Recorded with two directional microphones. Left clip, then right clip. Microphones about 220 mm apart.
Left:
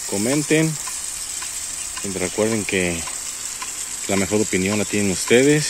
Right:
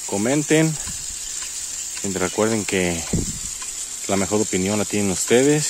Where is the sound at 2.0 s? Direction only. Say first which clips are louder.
Right 1 dB; 40° right (ahead or behind).